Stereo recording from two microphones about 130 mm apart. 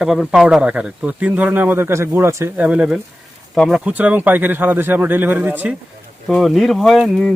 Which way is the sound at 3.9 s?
10° right (ahead or behind).